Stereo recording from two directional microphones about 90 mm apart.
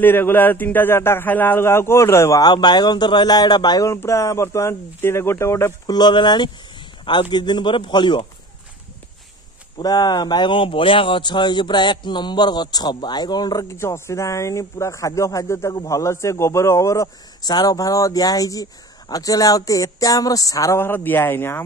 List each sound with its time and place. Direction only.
0.0 s speech: 25° left (ahead or behind)
2.4 s speech: 55° left (ahead or behind)
3.9 s a man's voice: 30° left (ahead or behind)
5.9 s speech: 50° left (ahead or behind)
9.8 s speech: 50° left (ahead or behind)
13.7 s a man's voice: 30° left (ahead or behind)
15.7 s speech: 45° left (ahead or behind)
16.0 s a man's voice: 35° left (ahead or behind)
20.8 s speech: 25° left (ahead or behind)